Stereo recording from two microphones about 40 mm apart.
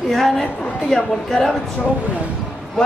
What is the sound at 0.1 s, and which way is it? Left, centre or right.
Speech, centre.